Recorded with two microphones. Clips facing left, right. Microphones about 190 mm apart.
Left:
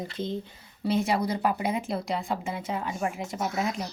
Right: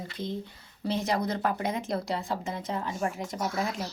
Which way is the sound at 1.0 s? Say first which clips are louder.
Left 2 dB; 10° left (ahead or behind).